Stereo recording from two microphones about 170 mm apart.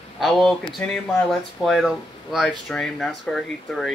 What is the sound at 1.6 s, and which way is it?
Speech, centre (ahead or behind).